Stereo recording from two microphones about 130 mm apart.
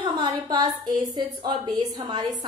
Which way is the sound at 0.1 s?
30° right (ahead or behind).